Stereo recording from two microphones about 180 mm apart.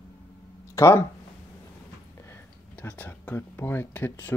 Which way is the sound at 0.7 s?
15° left (ahead or behind).